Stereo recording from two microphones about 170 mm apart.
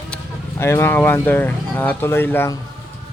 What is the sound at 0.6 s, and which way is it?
Speech, 15° left (ahead or behind).